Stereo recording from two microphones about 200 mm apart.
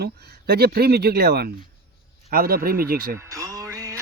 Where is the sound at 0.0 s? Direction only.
55° right (ahead or behind).